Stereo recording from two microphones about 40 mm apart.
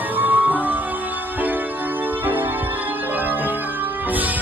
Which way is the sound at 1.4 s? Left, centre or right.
Right.